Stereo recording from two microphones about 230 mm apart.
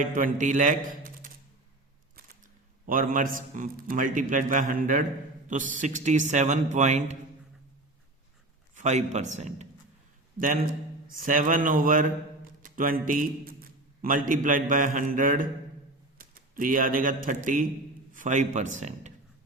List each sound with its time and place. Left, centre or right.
0.0 s a man's voice: right
2.8 s a man's voice: right
8.7 s a man's voice: right